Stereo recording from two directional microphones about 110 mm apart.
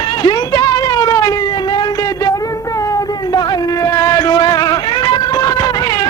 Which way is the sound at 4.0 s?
30° left (ahead or behind).